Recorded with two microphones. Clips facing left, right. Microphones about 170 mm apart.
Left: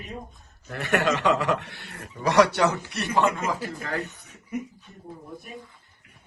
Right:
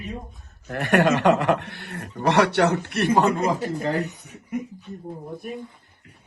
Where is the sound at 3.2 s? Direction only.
35° right (ahead or behind).